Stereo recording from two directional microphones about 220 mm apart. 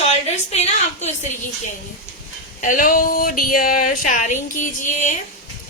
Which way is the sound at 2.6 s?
40° left (ahead or behind).